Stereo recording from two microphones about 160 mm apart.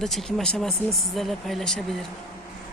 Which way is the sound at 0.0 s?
Centre (ahead or behind).